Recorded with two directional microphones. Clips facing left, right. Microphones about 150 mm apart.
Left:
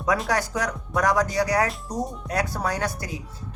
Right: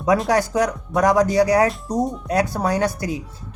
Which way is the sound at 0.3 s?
25° right (ahead or behind).